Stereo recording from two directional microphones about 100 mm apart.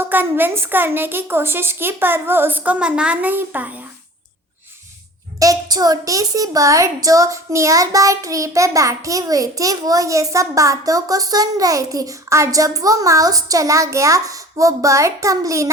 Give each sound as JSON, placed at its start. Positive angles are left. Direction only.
{"t": 0.0, "sound": "a woman's voice", "side_deg": -20}
{"t": 5.4, "sound": "a woman's voice", "side_deg": -40}